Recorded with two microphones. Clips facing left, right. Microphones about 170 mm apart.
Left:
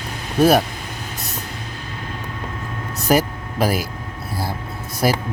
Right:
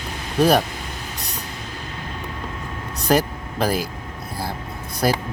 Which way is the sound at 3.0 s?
10° left (ahead or behind).